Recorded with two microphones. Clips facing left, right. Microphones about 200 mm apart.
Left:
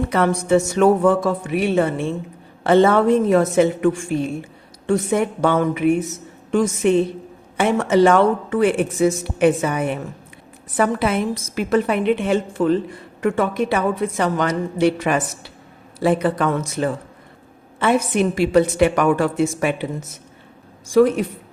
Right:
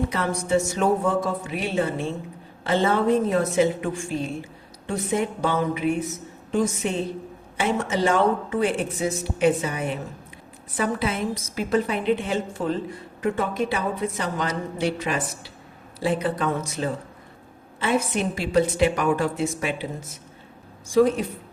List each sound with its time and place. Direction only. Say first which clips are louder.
0.1 s a woman's voice: left 6 dB; 65° left (ahead or behind)
1.0 s a woman's voice: left 7 dB; 75° left (ahead or behind)
3.5 s a woman's voice: left 5 dB; 60° left (ahead or behind)
6.5 s a woman's voice: left 7 dB; 70° left (ahead or behind)
7.5 s a woman's voice: left 8 dB; 60° left (ahead or behind)
9.0 s a woman's voice: left 7 dB; 50° left (ahead or behind); by 16.9 s 80° left
17.7 s a woman's voice: left 6 dB; 60° left (ahead or behind)